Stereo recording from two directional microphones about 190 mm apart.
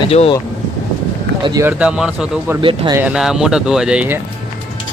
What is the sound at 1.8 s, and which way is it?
Speech, 5° right (ahead or behind).